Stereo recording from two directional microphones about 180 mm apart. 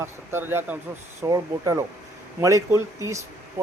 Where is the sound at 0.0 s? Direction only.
15° right (ahead or behind).